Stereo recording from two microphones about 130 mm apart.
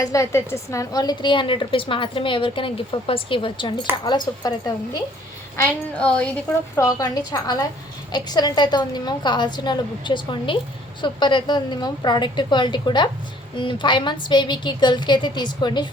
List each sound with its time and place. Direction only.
0.0 s a woman's voice: 25° left (ahead or behind)
6.0 s a woman's voice: 10° left (ahead or behind)
6.7 s a woman's voice: 25° left (ahead or behind)